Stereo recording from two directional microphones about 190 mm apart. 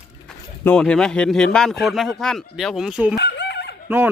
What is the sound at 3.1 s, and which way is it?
Chicken, 65° left (ahead or behind).